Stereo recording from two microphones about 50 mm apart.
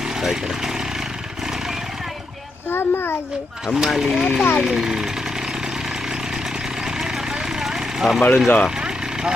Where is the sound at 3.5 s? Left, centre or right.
Centre.